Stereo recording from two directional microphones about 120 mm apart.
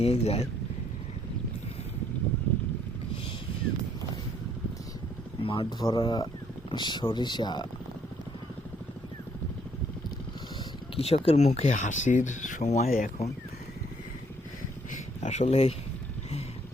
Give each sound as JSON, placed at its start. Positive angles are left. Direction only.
{"t": 0.0, "sound": "speech", "side_deg": 60}
{"t": 5.4, "sound": "speech", "side_deg": 45}
{"t": 5.9, "sound": "speech", "side_deg": 35}
{"t": 10.9, "sound": "speech", "side_deg": 55}
{"t": 14.9, "sound": "a sound", "side_deg": 75}